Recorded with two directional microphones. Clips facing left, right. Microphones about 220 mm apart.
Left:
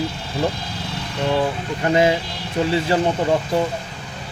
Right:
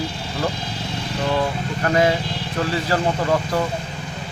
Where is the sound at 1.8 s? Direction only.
20° left (ahead or behind).